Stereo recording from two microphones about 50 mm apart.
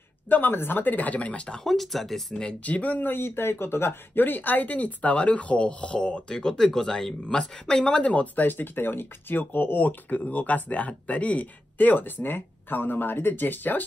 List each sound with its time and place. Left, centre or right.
0.3 s speech: left
1.6 s speech: centre
2.6 s speech: left